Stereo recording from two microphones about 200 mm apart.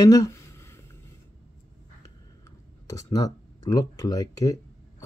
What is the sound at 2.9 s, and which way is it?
Speech, 15° left (ahead or behind).